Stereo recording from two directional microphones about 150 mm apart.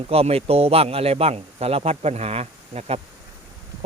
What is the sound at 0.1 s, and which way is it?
A man's voice, 40° right (ahead or behind).